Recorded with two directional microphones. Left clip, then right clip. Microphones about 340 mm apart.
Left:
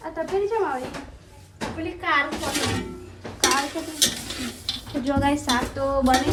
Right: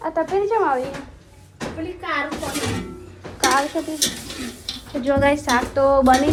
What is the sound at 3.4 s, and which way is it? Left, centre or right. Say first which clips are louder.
Stir: right 4 dB; centre.